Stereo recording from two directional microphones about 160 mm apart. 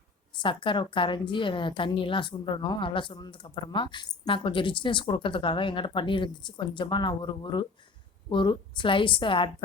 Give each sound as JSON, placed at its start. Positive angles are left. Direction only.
{"t": 0.3, "sound": "a woman's voice", "side_deg": 30}